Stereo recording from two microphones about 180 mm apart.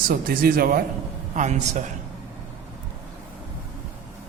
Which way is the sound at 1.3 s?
45° right (ahead or behind).